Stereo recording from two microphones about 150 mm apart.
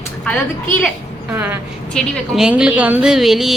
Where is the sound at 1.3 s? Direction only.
15° right (ahead or behind).